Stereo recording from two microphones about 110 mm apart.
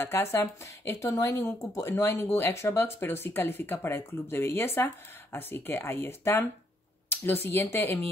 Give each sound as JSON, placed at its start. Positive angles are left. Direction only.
{"t": 0.0, "sound": "speech", "side_deg": 25}